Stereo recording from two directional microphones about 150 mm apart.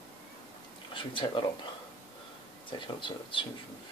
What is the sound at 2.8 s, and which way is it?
Speech, 35° left (ahead or behind).